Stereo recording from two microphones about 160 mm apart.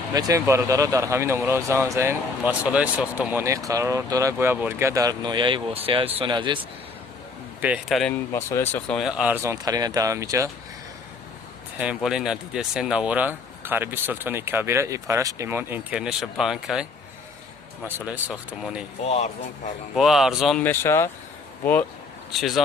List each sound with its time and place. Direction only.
0.1 s speech: 20° right (ahead or behind)
7.6 s speech: 10° right (ahead or behind)
8.3 s speech: 15° left (ahead or behind); by 10.5 s 20° right (ahead or behind)
11.9 s speech: 5° right (ahead or behind)
17.8 s speech: 10° right (ahead or behind)
19.0 s speech: 45° left (ahead or behind)
20.0 s speech: centre (ahead or behind)
20.6 s speech: 15° left (ahead or behind)
22.3 s speech: centre (ahead or behind)